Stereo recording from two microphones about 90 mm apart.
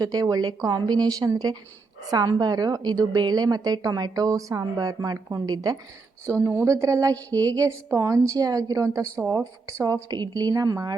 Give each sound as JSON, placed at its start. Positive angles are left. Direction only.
{"t": 0.0, "sound": "a woman's voice", "side_deg": -45}